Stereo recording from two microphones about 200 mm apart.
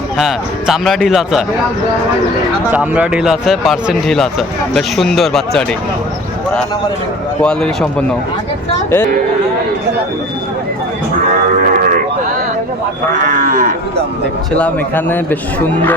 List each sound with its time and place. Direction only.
0.2 s speech: centre (ahead or behind)
2.7 s speech: 5° right (ahead or behind)
7.4 s speech: 5° left (ahead or behind)
13.2 s cattle: 40° right (ahead or behind)
14.5 s a man's voice: 10° left (ahead or behind)